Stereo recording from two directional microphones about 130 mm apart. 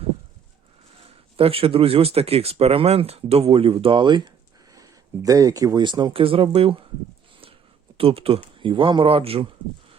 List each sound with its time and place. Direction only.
1.4 s speech: 45° right (ahead or behind)
7.9 s speech: 45° right (ahead or behind)